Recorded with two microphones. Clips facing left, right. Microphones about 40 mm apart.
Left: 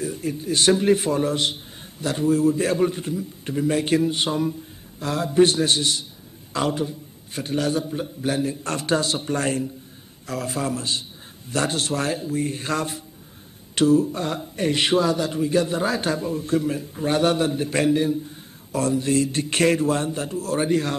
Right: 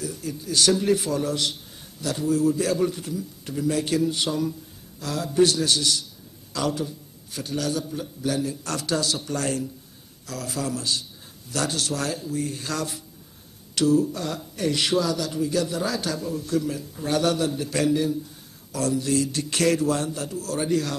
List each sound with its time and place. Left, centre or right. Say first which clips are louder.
0.0 s speech: left 5 dB; left